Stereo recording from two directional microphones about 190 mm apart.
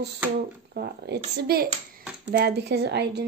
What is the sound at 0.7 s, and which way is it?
Speech, 55° right (ahead or behind).